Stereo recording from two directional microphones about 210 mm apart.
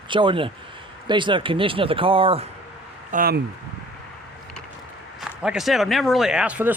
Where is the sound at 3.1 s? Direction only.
45° right (ahead or behind).